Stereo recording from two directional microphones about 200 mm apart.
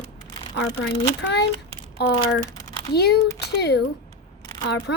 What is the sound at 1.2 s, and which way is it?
Speech, 55° left (ahead or behind).